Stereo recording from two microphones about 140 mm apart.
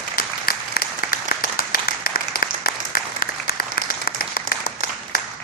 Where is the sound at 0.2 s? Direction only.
90° left.